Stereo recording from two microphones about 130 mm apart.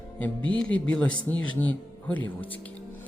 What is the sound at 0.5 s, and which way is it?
Speech, 10° left (ahead or behind).